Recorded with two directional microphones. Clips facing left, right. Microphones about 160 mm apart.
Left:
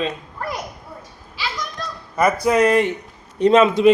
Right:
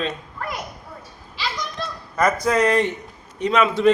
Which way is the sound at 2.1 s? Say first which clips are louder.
Left 3 dB; 10° left (ahead or behind).